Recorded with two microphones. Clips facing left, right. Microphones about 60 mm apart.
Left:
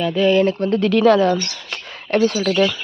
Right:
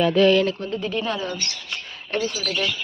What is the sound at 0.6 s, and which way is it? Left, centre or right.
Speech, left.